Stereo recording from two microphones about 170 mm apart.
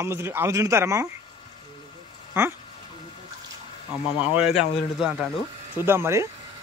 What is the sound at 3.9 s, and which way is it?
A man's voice, 5° right (ahead or behind).